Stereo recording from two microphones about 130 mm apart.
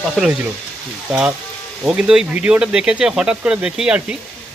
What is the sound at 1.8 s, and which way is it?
Speech, 5° right (ahead or behind).